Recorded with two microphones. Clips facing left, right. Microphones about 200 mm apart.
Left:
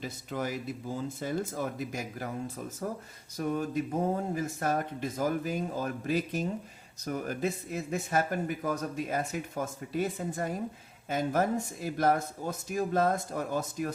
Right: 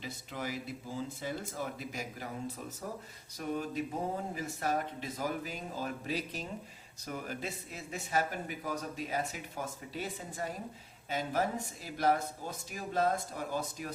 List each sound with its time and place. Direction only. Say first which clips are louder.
0.0 s speech: left 6 dB; 50° left (ahead or behind)
3.3 s speech: left 5 dB; 45° left (ahead or behind)